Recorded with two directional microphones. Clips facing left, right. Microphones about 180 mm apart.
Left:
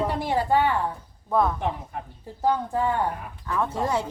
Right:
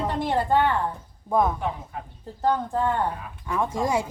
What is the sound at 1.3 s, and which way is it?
Speech, 15° right (ahead or behind).